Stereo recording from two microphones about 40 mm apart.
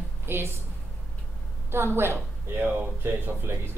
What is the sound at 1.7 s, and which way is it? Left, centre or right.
Speech, right.